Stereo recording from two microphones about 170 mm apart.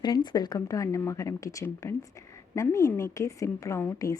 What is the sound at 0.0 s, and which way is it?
A woman's voice, 25° left (ahead or behind).